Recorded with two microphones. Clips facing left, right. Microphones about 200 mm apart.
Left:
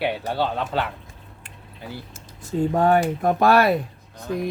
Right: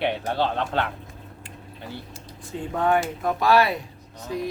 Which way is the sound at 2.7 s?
40° left (ahead or behind).